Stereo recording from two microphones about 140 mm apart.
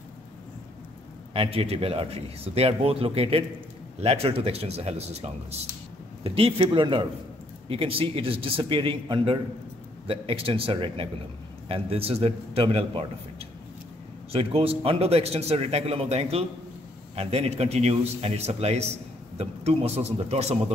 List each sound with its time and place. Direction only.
1.3 s a man's voice: 45° right (ahead or behind)